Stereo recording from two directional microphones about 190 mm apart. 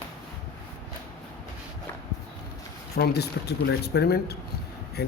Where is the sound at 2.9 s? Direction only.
60° left (ahead or behind).